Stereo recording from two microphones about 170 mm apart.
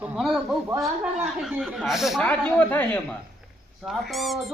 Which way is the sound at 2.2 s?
10° left (ahead or behind).